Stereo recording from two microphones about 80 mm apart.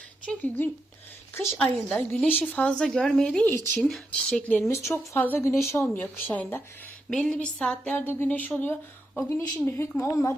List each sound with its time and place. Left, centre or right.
0.3 s a woman's voice: left; by 4.0 s centre
4.1 s a woman's voice: centre
4.7 s speech: left
7.1 s a woman's voice: centre
9.6 s speech: left